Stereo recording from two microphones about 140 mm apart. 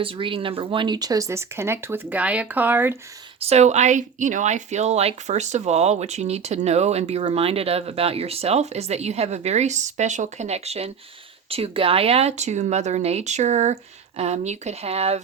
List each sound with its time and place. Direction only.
0.0 s speech: 40° right (ahead or behind); by 3.0 s 15° right (ahead or behind)
3.4 s speech: 50° right (ahead or behind)